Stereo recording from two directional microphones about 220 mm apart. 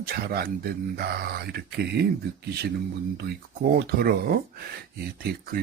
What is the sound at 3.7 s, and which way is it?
Speech, 40° right (ahead or behind).